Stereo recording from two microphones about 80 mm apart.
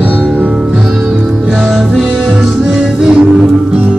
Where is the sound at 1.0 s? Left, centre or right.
Centre.